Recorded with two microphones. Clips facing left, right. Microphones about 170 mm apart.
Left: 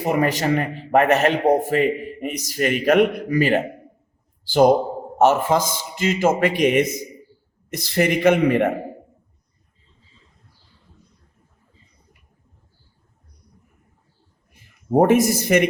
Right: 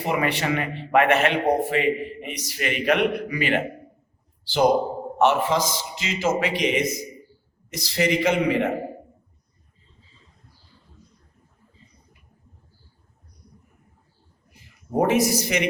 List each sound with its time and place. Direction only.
0.0 s a man's voice: 45° left (ahead or behind)
14.5 s speech: 50° left (ahead or behind)